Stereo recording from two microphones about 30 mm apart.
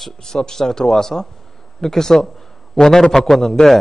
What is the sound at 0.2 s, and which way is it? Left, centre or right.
Speech, centre.